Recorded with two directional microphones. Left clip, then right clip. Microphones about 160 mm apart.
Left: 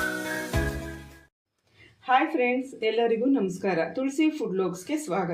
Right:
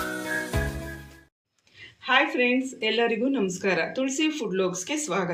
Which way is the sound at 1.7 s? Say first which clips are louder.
Right 1 dB; 55° left (ahead or behind).